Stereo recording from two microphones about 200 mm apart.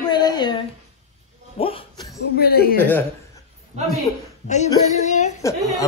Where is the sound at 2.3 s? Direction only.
50° left (ahead or behind).